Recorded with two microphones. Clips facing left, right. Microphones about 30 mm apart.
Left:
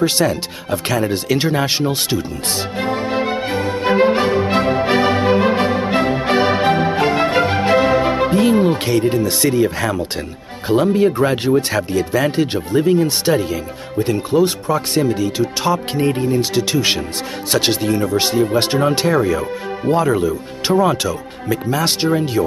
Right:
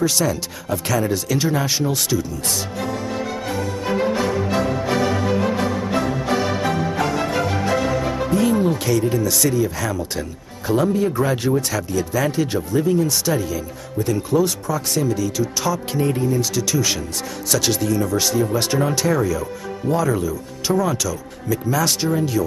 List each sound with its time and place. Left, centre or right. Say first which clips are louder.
0.0 s speech: left 4 dB; left
2.8 s music: left 9 dB; left
10.7 s speech: left 4 dB; left